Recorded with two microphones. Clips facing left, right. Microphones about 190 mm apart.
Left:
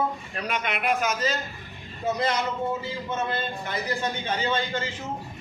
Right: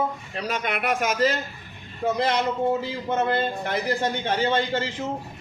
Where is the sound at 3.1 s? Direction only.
65° right (ahead or behind).